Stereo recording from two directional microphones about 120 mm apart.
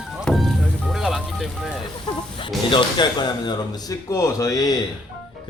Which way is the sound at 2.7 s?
40° left (ahead or behind).